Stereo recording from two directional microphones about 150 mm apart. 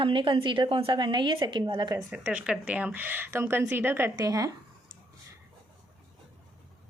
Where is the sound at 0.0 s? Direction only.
35° right (ahead or behind).